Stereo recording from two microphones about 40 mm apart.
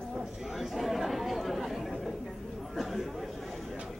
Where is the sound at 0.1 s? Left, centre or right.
Centre.